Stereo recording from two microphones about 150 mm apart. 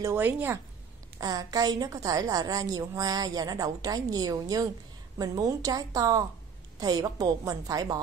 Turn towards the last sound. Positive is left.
turn(degrees=-25)  # may be behind; listen again after turning